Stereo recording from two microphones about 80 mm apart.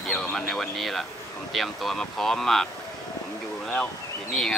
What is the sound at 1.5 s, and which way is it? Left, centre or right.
Speech, centre.